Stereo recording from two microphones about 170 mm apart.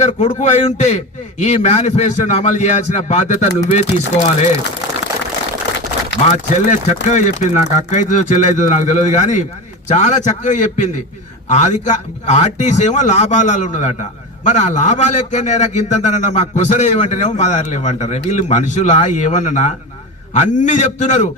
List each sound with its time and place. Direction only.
0.0 s a man's voice: 45° left (ahead or behind)
6.3 s a man's voice: 45° left (ahead or behind)